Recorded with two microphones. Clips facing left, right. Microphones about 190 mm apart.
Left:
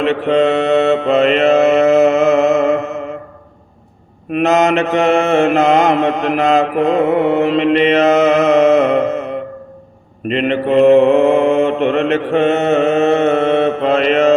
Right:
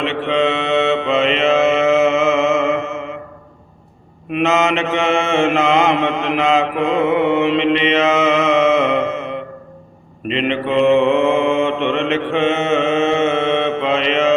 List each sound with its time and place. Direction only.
0.0 s mantra: 40° left (ahead or behind)
4.3 s mantra: 40° left (ahead or behind)